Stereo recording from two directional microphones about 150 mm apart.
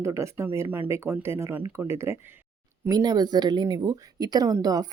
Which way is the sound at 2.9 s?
30° right (ahead or behind).